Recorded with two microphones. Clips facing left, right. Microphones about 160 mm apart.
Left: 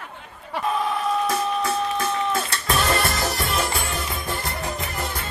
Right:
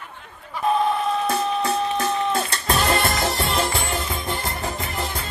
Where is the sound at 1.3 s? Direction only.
30° right (ahead or behind).